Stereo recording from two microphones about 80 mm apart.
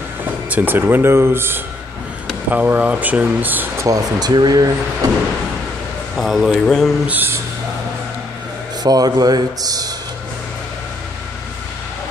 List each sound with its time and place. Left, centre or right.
0.5 s speech: right
3.8 s speech: right
6.1 s speech: centre
7.1 s speech: right
8.8 s speech: right